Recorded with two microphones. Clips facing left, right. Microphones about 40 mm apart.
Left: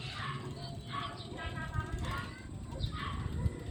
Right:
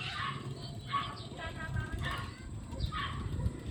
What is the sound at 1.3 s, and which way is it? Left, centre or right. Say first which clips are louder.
Vehicle: even; centre.